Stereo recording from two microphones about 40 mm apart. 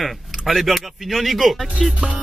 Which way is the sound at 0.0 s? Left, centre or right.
Centre.